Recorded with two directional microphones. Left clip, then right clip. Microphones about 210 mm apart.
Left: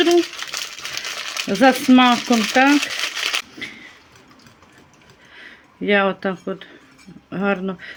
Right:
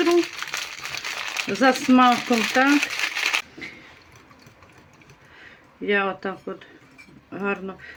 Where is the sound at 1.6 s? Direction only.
30° left (ahead or behind).